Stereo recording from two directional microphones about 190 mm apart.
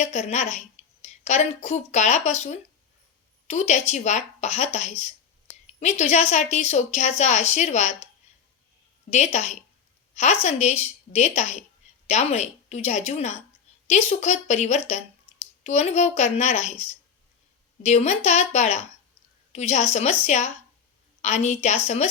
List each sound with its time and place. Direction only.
0.0 s a woman's voice: 35° left (ahead or behind)
9.0 s a woman's voice: 35° left (ahead or behind)